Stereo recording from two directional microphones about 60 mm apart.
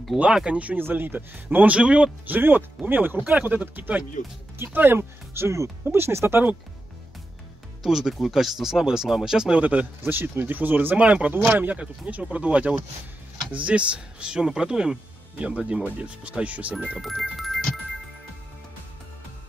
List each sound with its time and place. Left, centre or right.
0.2 s speech: centre
0.7 s speech: right
1.7 s speech: centre
2.3 s speech: right
7.8 s speech: centre
9.6 s speech: right
16.7 s speech: centre
17.0 s music: centre